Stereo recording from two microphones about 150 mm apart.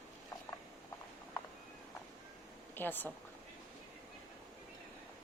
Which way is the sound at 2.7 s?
15° left (ahead or behind).